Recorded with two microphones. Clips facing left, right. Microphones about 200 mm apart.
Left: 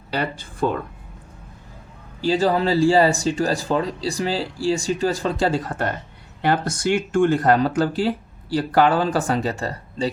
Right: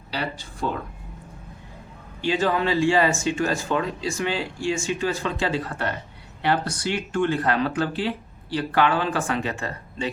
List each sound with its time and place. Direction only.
2.2 s speech: 35° left (ahead or behind)